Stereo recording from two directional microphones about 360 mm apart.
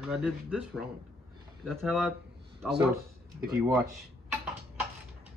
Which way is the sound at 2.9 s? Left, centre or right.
Right.